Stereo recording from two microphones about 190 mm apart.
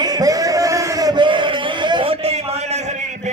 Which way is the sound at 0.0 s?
20° right (ahead or behind).